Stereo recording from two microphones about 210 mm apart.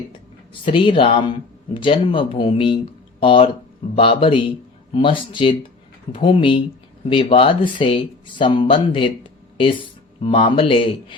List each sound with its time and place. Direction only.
0.6 s speech: 25° left (ahead or behind)